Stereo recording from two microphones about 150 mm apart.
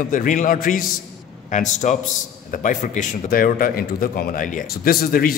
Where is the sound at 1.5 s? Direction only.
55° left (ahead or behind); by 5.3 s 80° left.